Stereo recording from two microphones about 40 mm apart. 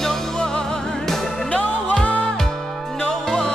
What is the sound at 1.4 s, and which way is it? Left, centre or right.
Music, left.